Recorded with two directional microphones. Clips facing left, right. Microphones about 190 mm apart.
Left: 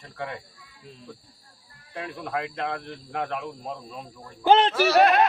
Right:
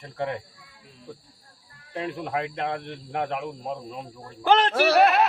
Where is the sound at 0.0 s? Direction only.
25° right (ahead or behind).